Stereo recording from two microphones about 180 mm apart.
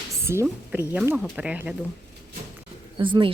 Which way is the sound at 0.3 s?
10° right (ahead or behind).